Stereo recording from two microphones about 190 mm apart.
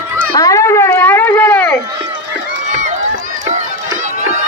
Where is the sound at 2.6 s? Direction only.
40° right (ahead or behind).